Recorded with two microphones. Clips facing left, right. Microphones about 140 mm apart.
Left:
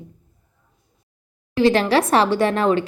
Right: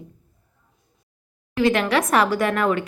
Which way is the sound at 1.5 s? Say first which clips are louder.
Left 3 dB; 30° left (ahead or behind).